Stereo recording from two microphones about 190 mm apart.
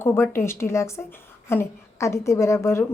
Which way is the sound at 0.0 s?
15° left (ahead or behind).